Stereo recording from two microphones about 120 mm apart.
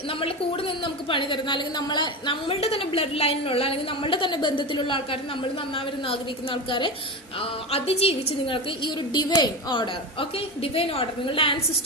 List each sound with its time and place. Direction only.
0.1 s a woman's voice: 50° left (ahead or behind)